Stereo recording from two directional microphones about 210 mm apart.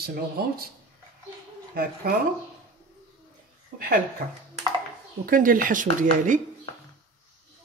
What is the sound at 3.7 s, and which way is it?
Speech, 45° right (ahead or behind).